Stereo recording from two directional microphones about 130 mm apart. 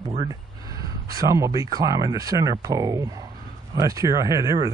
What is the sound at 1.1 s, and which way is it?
Speech, 25° right (ahead or behind).